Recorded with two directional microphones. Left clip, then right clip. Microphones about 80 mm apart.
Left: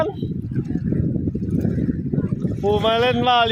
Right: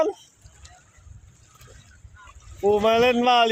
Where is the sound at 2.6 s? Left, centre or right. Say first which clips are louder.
Even; centre.